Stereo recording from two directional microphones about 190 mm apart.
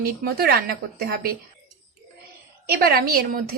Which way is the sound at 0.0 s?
55° right (ahead or behind).